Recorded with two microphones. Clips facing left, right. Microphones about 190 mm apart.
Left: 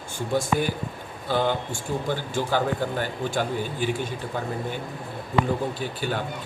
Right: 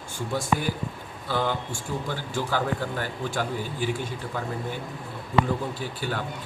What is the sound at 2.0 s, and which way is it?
A man's voice, 25° left (ahead or behind).